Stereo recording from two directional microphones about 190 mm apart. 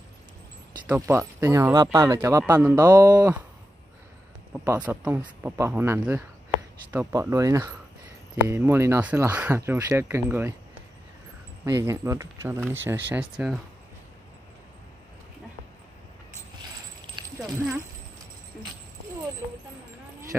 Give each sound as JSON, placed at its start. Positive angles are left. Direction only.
{"t": 0.8, "sound": "speech", "side_deg": -10}
{"t": 4.6, "sound": "speech", "side_deg": -5}
{"t": 11.6, "sound": "speech", "side_deg": -15}